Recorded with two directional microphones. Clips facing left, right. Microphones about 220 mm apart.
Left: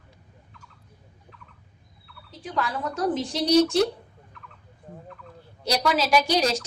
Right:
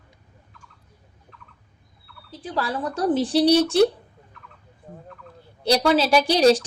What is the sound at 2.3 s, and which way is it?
A woman's voice, 35° right (ahead or behind).